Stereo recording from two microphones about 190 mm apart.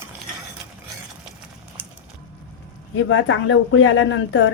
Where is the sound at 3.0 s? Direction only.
90° left.